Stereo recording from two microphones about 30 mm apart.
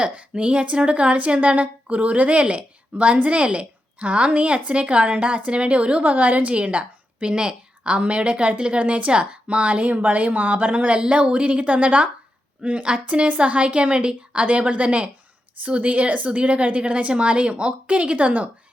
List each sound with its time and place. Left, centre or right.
0.1 s a woman's voice: right
1.4 s a woman's voice: right
6.0 s a woman's voice: right
7.2 s a woman's voice: right
11.1 s a woman's voice: right
14.4 s a woman's voice: right